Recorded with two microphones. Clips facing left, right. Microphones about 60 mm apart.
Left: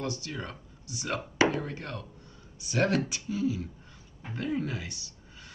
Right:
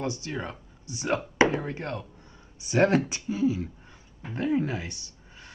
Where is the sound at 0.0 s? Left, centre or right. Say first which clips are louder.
Right 3 dB; right.